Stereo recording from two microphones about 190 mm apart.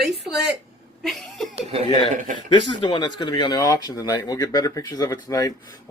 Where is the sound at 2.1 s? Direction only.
45° right (ahead or behind).